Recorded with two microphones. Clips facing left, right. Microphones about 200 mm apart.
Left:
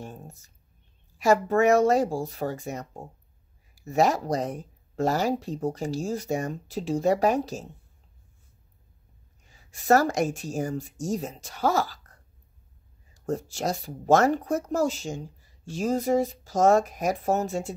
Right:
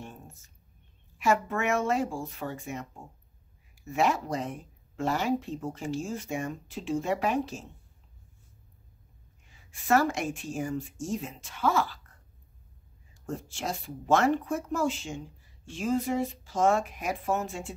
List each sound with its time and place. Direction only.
0.0 s a sound: 40° left (ahead or behind)
1.1 s speech: 40° left (ahead or behind)
9.5 s speech: 40° left (ahead or behind)
13.1 s speech: 40° left (ahead or behind)